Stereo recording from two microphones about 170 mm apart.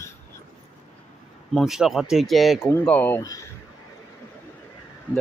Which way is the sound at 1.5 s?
Centre (ahead or behind).